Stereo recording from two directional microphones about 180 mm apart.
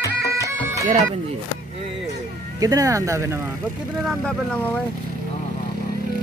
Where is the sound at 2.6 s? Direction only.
20° right (ahead or behind).